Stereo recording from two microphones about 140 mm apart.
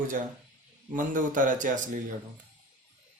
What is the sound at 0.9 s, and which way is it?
Speech, 70° right (ahead or behind).